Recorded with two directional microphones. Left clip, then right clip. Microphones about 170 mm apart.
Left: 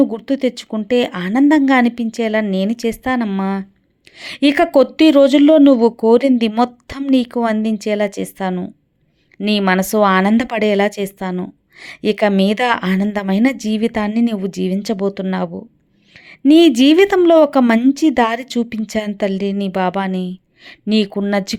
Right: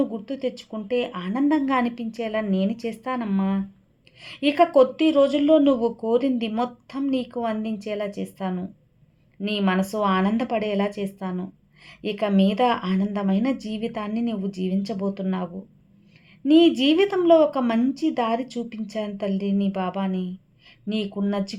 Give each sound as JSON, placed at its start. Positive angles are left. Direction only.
{"t": 0.0, "sound": "speech", "side_deg": 45}